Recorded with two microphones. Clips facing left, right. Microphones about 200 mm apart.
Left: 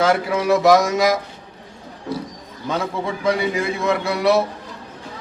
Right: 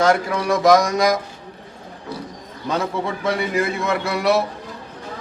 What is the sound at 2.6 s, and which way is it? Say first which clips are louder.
A man's voice: right 1 dB; centre (ahead or behind).